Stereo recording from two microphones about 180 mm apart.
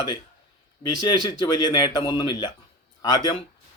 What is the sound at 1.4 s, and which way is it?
A man's voice, 25° left (ahead or behind).